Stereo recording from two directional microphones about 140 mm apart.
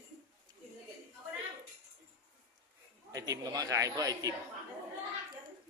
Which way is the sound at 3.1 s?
25° right (ahead or behind).